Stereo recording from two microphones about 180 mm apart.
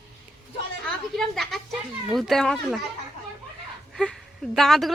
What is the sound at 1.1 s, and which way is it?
Speech, centre (ahead or behind).